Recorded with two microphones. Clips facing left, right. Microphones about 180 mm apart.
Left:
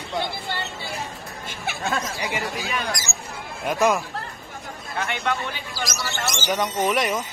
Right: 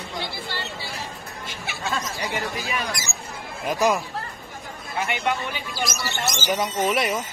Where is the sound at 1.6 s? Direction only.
55° left (ahead or behind).